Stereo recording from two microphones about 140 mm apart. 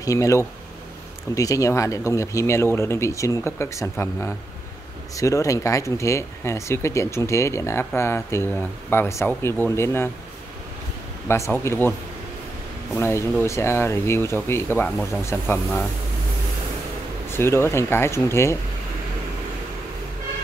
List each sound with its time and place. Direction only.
0.0 s speech: 25° left (ahead or behind)
11.2 s speech: 20° left (ahead or behind)
12.9 s speech: 15° left (ahead or behind)
17.3 s speech: 15° left (ahead or behind)